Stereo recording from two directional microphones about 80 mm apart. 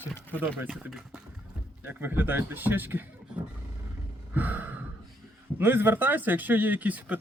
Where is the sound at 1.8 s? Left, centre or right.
Right.